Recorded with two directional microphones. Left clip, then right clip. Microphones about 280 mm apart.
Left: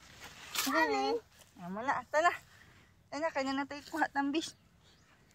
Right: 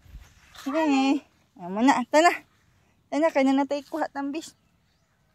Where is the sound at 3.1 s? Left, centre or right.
Right.